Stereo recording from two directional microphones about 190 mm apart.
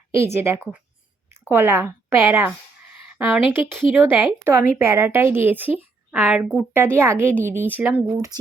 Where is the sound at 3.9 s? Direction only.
10° right (ahead or behind).